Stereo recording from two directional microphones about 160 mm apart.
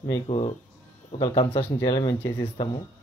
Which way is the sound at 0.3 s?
30° left (ahead or behind).